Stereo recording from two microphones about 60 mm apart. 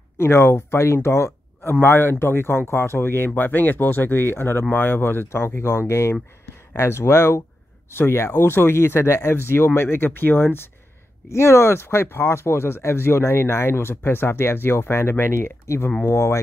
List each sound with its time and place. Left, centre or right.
0.2 s speech: left